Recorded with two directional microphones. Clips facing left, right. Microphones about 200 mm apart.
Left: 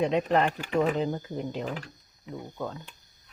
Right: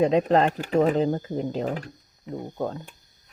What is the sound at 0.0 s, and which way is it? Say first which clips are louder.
Speech: right 5 dB; 35° right (ahead or behind).